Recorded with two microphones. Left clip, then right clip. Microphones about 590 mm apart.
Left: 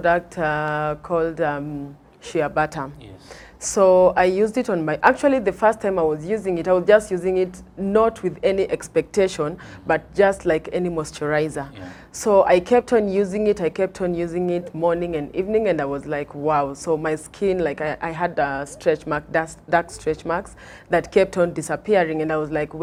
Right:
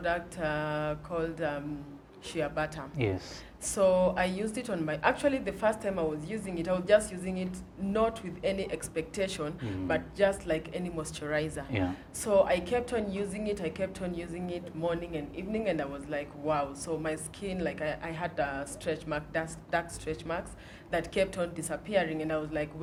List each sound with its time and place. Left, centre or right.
0.0 s a woman's voice: left